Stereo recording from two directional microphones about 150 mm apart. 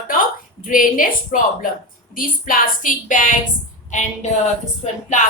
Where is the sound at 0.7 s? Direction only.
65° left (ahead or behind).